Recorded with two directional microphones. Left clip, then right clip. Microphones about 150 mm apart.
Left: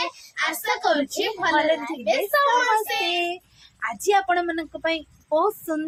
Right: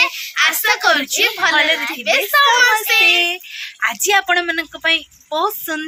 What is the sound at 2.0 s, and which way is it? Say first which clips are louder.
Speech: right 6 dB; 35° left (ahead or behind).